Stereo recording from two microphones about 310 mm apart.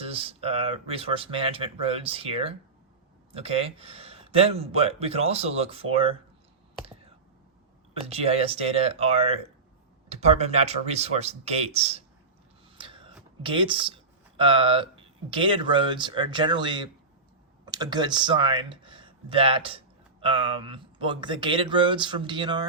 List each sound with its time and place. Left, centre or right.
0.1 s speech: centre
7.9 s speech: centre
12.7 s a sound: centre
13.4 s speech: centre